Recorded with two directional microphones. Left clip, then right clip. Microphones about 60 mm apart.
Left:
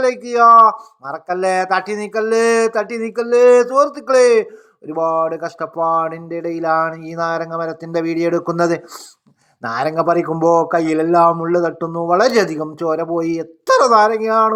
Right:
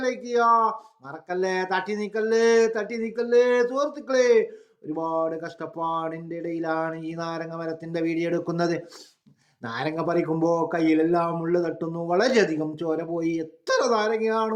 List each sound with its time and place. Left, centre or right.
0.0 s speech: left
4.9 s speech: left
7.3 s speech: left
12.0 s speech: left
14.2 s speech: left